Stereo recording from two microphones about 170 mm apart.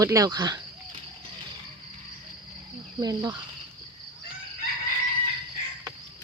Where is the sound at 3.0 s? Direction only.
20° right (ahead or behind).